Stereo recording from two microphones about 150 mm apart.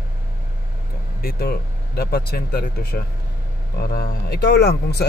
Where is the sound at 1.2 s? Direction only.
85° left.